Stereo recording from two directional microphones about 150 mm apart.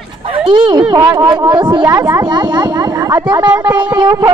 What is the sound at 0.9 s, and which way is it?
Speech, 30° right (ahead or behind).